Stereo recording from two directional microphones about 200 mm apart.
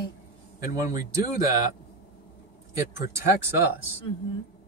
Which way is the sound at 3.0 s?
15° right (ahead or behind).